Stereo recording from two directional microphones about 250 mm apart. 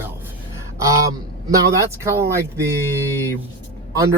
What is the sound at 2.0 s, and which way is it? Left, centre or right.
Speech, centre.